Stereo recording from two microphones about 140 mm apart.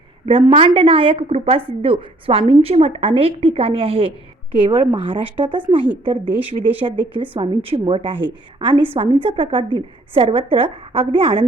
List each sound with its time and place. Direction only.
0.3 s speech: 40° right (ahead or behind)
5.8 s a woman's voice: 10° right (ahead or behind)
7.2 s a woman's voice: 40° right (ahead or behind)